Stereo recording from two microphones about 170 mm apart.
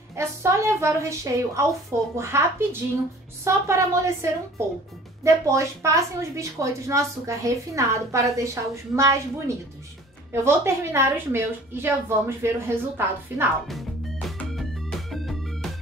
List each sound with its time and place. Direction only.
0.1 s a woman's voice: 15° right (ahead or behind)
13.7 s music: centre (ahead or behind)